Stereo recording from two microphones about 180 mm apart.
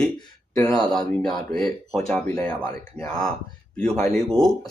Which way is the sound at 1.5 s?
5° left (ahead or behind).